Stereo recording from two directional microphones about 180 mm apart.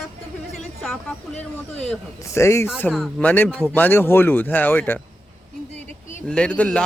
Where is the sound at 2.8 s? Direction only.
Centre (ahead or behind).